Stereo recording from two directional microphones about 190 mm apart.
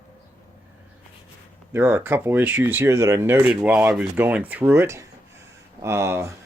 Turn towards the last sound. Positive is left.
turn(degrees=-15)  # may be behind; listen again after turning